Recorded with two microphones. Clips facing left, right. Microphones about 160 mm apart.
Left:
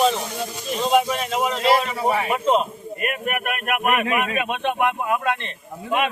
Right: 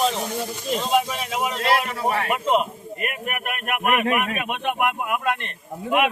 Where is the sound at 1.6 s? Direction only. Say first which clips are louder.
Left 3 dB; 5° left (ahead or behind).